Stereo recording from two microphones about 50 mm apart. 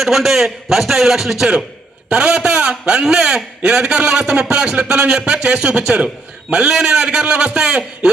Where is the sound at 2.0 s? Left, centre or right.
Centre.